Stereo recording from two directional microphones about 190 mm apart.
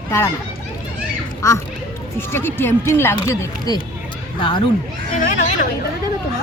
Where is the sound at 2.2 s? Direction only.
10° left (ahead or behind).